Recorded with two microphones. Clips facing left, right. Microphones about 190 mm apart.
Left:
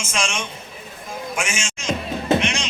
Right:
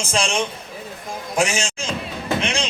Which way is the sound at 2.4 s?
35° right (ahead or behind).